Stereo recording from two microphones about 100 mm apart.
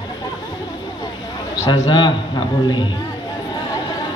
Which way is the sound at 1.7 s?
45° left (ahead or behind).